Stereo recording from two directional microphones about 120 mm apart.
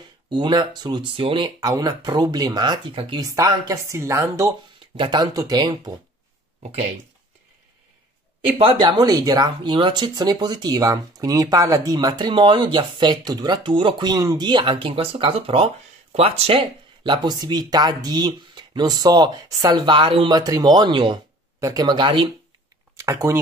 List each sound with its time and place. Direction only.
0.3 s speech: 40° right (ahead or behind)
3.2 s speech: 30° right (ahead or behind)
4.9 s speech: 40° right (ahead or behind)
8.7 s speech: 35° right (ahead or behind); by 16.6 s 55° right (ahead or behind)
17.0 s speech: 40° right (ahead or behind)
20.3 s speech: 30° right (ahead or behind)
21.5 s speech: 25° right (ahead or behind)
21.8 s speech: 40° right (ahead or behind)
22.9 s speech: 25° right (ahead or behind)